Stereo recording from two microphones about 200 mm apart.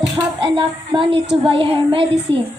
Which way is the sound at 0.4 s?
25° right (ahead or behind).